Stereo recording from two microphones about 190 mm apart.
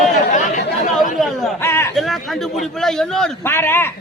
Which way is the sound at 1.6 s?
15° left (ahead or behind).